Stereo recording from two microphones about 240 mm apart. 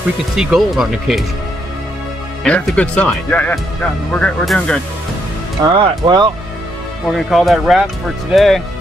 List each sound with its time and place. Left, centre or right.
0.4 s speech: centre
2.4 s speech: centre
5.7 s speech: centre
7.2 s speech: centre